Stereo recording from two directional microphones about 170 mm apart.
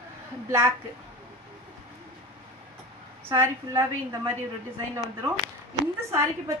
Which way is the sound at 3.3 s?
20° right (ahead or behind).